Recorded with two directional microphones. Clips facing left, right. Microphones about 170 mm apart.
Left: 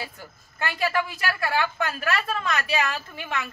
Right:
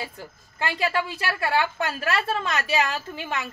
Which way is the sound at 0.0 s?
25° right (ahead or behind).